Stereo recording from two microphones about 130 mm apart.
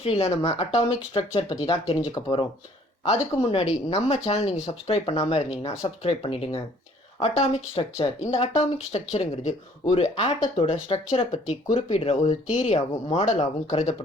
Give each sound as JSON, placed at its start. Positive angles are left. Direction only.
{"t": 0.0, "sound": "speech", "side_deg": 50}
{"t": 3.8, "sound": "speech", "side_deg": 55}
{"t": 10.4, "sound": "speech", "side_deg": 45}